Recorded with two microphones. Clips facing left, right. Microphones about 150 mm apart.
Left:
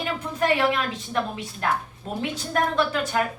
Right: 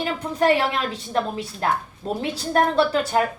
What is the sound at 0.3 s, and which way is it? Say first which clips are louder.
A woman's voice: right 2 dB; 35° right (ahead or behind).